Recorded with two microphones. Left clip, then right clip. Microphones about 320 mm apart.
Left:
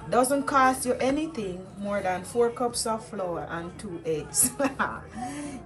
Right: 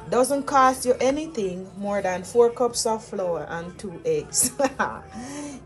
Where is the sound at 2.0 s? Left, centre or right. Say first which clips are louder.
Right 1 dB; right.